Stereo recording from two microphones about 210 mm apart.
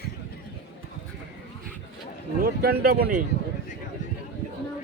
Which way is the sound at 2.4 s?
45° right (ahead or behind).